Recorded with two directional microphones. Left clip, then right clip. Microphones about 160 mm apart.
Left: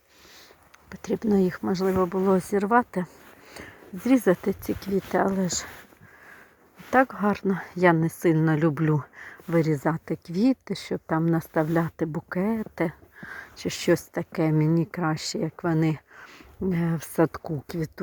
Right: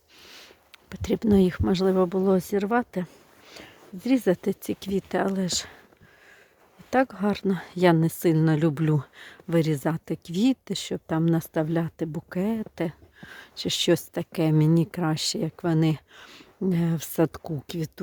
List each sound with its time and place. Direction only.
1.0 s speech: 60° right (ahead or behind)
2.1 s speech: 20° right (ahead or behind)
4.4 s speech: 50° right (ahead or behind)
4.9 s speech: 10° right (ahead or behind)
7.2 s speech: 40° right (ahead or behind)
9.1 s a sound: 45° right (ahead or behind)
9.6 s speech: 20° right (ahead or behind)
9.9 s speech: 50° right (ahead or behind)
11.6 s speech: 25° right (ahead or behind)
12.3 s a sound: 45° right (ahead or behind)
13.6 s speech: 60° right (ahead or behind)
17.5 s speech: 20° right (ahead or behind)